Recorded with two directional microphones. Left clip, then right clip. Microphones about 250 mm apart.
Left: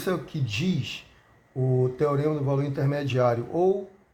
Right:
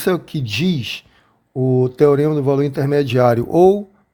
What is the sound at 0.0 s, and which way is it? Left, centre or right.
Speech, right.